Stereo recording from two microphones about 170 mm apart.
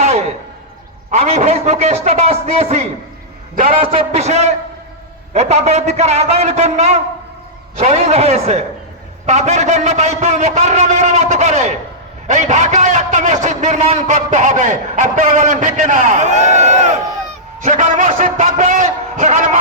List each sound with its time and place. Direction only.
0.0 s a sound: 40° right (ahead or behind)
1.1 s a man's voice: 40° right (ahead or behind)
3.5 s a man's voice: 55° right (ahead or behind)
3.9 s a man's voice: 40° right (ahead or behind)